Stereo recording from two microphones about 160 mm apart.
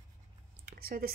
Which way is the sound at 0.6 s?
70° right (ahead or behind).